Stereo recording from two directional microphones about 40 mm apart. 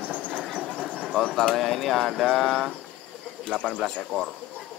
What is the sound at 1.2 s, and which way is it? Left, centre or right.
Speech, centre.